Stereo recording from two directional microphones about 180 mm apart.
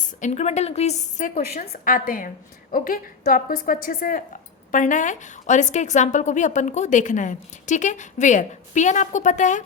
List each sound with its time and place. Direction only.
0.2 s a woman's voice: 40° left (ahead or behind)